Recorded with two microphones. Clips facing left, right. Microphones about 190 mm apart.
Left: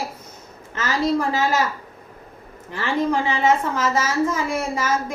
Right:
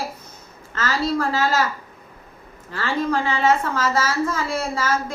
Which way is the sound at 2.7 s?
15° left (ahead or behind).